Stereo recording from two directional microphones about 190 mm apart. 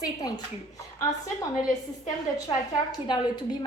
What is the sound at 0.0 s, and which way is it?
Speech, 20° left (ahead or behind).